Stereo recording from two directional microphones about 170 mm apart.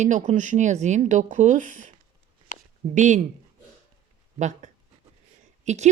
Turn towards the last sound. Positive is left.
turn(degrees=-40)  # may be behind; listen again after turning